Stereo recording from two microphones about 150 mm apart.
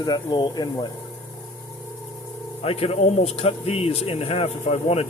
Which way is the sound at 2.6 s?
40° left (ahead or behind).